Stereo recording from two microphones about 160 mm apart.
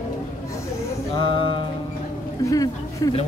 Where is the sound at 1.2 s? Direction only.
30° left (ahead or behind).